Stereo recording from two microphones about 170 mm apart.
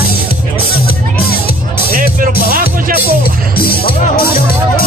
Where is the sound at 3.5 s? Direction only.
60° left (ahead or behind).